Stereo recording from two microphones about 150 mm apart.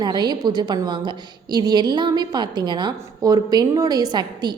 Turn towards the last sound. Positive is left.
turn(degrees=-30)  # may be behind; listen again after turning